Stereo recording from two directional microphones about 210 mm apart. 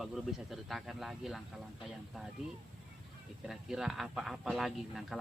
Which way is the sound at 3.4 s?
Centre (ahead or behind).